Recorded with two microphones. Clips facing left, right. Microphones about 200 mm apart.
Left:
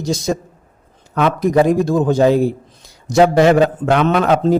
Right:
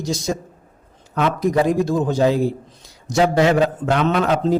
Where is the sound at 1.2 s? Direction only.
55° left (ahead or behind).